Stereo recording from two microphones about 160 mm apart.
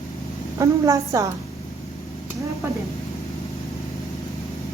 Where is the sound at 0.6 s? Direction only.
20° right (ahead or behind).